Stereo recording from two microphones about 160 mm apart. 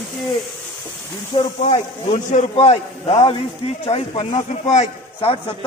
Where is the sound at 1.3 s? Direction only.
45° left (ahead or behind).